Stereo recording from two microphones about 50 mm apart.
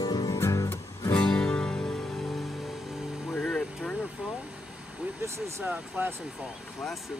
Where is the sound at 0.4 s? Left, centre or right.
Left.